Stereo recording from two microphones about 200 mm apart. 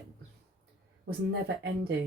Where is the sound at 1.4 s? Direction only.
60° right (ahead or behind).